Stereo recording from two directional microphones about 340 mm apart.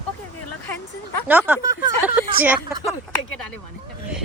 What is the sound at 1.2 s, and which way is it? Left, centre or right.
Speech, centre.